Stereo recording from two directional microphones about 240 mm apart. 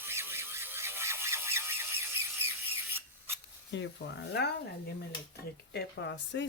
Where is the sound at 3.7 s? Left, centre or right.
Left.